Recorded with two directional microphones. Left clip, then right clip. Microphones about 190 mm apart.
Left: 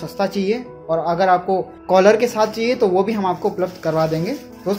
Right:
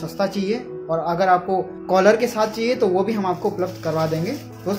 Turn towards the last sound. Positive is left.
turn(degrees=20)  # may be behind; listen again after turning